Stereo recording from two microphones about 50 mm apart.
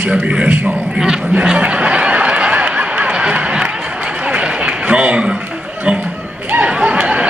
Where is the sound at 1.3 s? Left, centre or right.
Right.